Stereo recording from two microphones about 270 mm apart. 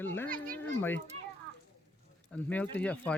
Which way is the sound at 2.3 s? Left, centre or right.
Centre.